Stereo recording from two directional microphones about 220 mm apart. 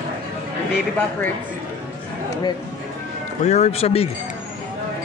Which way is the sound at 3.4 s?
30° left (ahead or behind).